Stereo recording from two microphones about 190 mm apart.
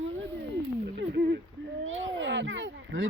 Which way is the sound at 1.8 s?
90° right.